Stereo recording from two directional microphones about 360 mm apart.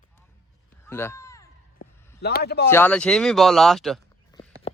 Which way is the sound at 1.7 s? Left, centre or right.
Left.